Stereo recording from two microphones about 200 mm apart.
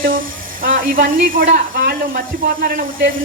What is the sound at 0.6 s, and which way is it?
Speech, 45° right (ahead or behind).